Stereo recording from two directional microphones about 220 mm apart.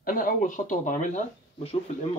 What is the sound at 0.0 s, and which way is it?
Speech, 40° left (ahead or behind).